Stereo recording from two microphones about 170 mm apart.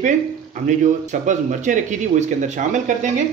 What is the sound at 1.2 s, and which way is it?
Speech, 45° right (ahead or behind).